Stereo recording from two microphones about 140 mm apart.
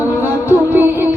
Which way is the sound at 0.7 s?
15° right (ahead or behind).